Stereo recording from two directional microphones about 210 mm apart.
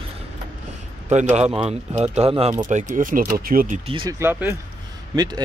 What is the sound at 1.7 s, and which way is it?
Speech, 30° right (ahead or behind).